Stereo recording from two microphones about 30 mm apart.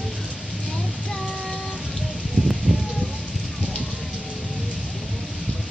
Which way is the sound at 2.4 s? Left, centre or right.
Left.